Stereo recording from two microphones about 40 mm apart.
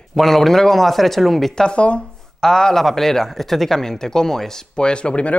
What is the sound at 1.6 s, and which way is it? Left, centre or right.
Speech, left.